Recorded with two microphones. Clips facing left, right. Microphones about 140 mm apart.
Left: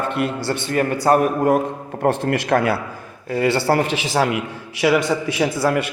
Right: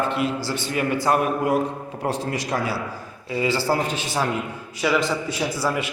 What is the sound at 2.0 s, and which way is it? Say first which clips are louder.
A man's voice: left 7 dB; 55° left (ahead or behind).